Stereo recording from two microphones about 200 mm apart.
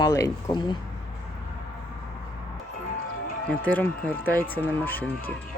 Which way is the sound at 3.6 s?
10° left (ahead or behind).